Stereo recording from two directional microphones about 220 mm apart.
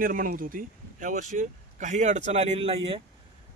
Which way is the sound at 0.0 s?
40° right (ahead or behind).